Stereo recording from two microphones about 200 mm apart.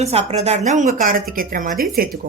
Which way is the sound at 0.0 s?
35° right (ahead or behind).